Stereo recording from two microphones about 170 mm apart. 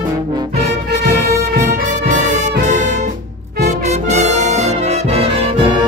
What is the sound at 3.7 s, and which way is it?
Brass instrument, 40° right (ahead or behind).